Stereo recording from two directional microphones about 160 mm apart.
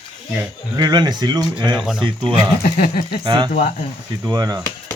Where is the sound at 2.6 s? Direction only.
55° left (ahead or behind).